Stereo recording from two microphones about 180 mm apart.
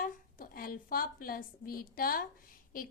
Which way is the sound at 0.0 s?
50° left (ahead or behind).